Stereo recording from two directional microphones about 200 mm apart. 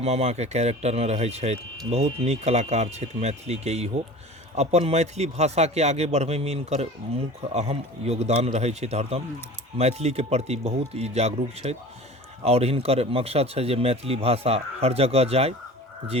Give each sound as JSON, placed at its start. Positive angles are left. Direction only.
{"t": 0.0, "sound": "speech", "side_deg": -30}